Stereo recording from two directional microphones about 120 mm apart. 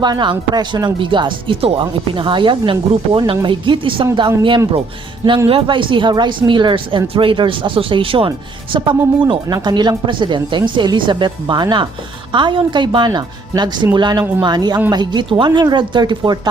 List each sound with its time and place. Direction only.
0.0 s speech: 40° right (ahead or behind)
5.5 s speech: 45° right (ahead or behind)